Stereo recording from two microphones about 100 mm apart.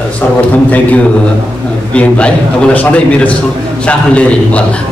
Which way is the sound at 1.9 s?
10° left (ahead or behind).